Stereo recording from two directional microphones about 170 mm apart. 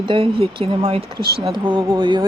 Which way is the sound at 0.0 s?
30° right (ahead or behind).